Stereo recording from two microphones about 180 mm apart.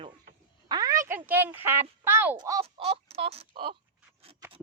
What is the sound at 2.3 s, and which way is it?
Speech, 20° right (ahead or behind).